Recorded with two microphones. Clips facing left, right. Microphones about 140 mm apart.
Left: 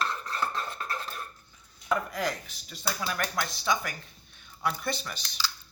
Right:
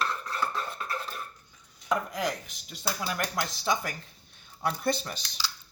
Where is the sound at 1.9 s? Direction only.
15° right (ahead or behind).